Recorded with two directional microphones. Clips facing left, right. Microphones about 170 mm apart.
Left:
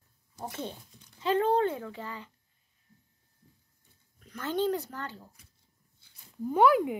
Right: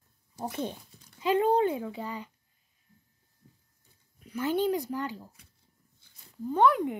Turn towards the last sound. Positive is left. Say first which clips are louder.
# left 1 dB
turn(degrees=5)  # may be behind; listen again after turning